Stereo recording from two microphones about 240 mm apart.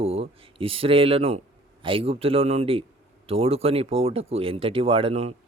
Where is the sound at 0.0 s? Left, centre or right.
Right.